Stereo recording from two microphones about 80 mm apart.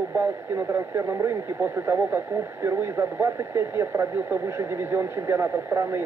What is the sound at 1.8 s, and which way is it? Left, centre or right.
Speech, right.